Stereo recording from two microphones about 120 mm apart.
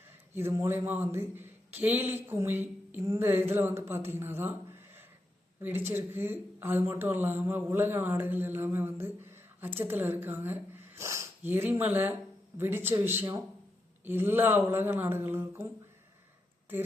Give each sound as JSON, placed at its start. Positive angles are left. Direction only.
{"t": 0.3, "sound": "a man's voice", "side_deg": -20}
{"t": 5.6, "sound": "a man's voice", "side_deg": -15}